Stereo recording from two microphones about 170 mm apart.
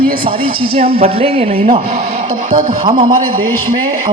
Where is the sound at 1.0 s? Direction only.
35° right (ahead or behind).